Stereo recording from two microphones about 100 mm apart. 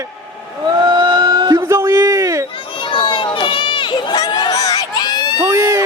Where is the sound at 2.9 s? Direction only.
55° left (ahead or behind).